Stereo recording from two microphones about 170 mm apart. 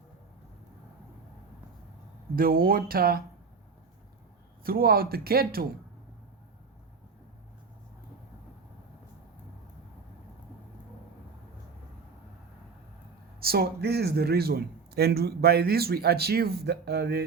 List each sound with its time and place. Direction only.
2.3 s speech: 60° right (ahead or behind)
4.6 s speech: 60° right (ahead or behind)
13.4 s speech: 65° right (ahead or behind)